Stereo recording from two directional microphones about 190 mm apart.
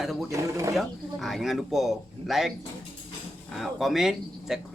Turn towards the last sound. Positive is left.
turn(degrees=0)  # may be behind; listen again after turning